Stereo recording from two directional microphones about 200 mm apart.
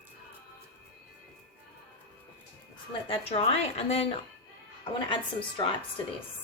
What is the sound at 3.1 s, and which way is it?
A woman's voice, 30° left (ahead or behind).